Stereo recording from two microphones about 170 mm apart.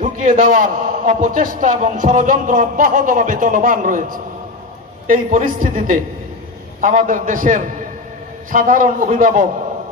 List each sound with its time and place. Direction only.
0.0 s a man's voice: 45° right (ahead or behind)